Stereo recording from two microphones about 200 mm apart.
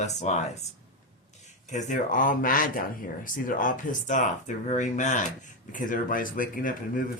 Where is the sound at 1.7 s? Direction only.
40° left (ahead or behind).